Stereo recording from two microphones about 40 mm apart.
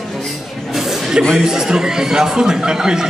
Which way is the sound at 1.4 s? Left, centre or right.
Centre.